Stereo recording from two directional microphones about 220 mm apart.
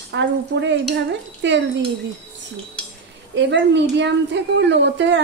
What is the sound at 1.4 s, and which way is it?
Speech, 55° right (ahead or behind).